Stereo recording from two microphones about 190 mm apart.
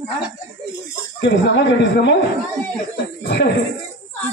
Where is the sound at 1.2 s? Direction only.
70° left (ahead or behind).